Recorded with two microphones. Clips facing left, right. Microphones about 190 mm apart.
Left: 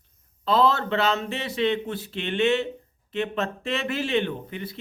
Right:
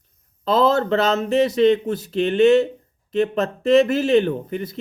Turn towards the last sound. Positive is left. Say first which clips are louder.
# right 8 dB
turn(degrees=-45)  # may be behind; listen again after turning